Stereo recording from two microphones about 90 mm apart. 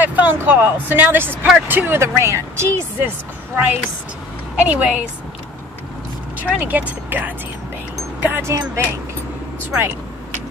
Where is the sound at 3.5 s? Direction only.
15° right (ahead or behind).